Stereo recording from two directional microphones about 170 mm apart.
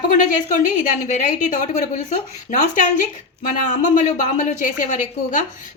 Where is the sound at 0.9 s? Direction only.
45° left (ahead or behind).